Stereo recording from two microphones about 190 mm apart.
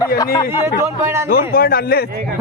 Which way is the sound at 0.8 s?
15° right (ahead or behind).